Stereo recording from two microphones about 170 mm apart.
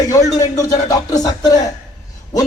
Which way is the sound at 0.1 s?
20° left (ahead or behind).